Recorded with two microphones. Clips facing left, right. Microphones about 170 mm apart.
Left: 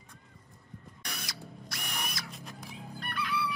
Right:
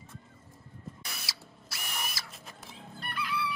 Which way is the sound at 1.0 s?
5° right (ahead or behind).